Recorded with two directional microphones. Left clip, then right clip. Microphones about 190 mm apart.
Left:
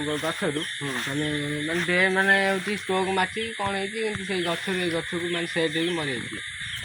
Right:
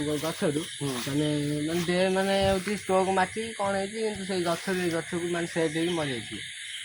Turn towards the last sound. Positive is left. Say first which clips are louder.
# left 2 dB
turn(degrees=-15)  # may be behind; listen again after turning